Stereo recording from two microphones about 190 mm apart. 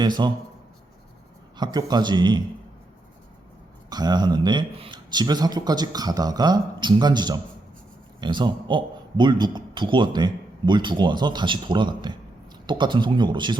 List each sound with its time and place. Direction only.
0.0 s a man's voice: 20° right (ahead or behind)
1.5 s a man's voice: 20° right (ahead or behind)
3.8 s a man's voice: 20° right (ahead or behind)